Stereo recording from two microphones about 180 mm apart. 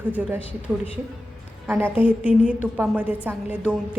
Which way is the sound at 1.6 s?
10° right (ahead or behind).